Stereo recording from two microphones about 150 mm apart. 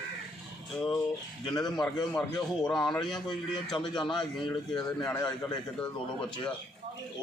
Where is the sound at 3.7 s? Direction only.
30° left (ahead or behind).